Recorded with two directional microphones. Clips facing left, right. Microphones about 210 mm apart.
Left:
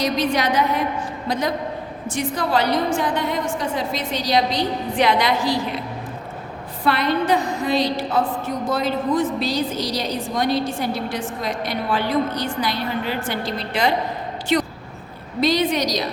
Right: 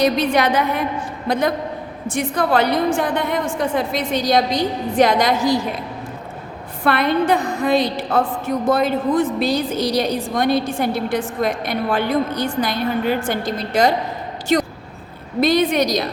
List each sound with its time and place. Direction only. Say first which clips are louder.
0.0 s a woman's voice: right 4 dB; 55° right (ahead or behind)
6.8 s a woman's voice: right 3 dB; 55° right (ahead or behind)
15.4 s a woman's voice: right 3 dB; 55° right (ahead or behind)